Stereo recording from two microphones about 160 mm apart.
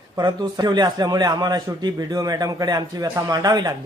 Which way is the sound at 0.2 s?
25° right (ahead or behind).